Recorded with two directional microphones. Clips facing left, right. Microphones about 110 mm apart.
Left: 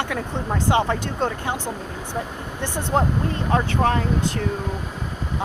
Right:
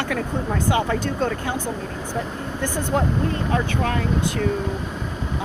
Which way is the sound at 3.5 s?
30° left (ahead or behind).